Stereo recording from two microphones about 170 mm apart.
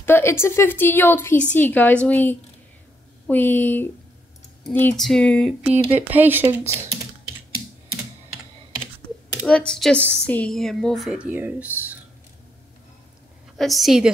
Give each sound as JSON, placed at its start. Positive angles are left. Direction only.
{"t": 0.0, "sound": "a woman's voice", "side_deg": 15}
{"t": 5.9, "sound": "speech", "side_deg": -10}
{"t": 9.5, "sound": "a woman's voice", "side_deg": 5}
{"t": 13.6, "sound": "a woman's voice", "side_deg": 0}